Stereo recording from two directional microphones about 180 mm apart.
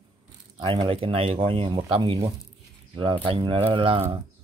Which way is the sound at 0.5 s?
25° right (ahead or behind).